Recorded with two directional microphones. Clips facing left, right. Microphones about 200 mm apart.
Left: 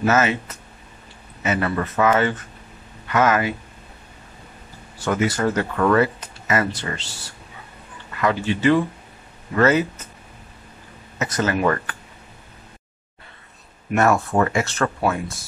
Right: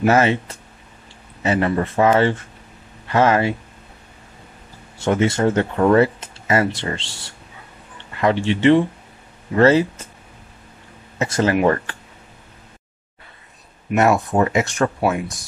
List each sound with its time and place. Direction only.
0.0 s speech: 30° right (ahead or behind)
4.9 s speech: 25° right (ahead or behind)
11.1 s speech: 30° right (ahead or behind)
13.9 s speech: 15° right (ahead or behind)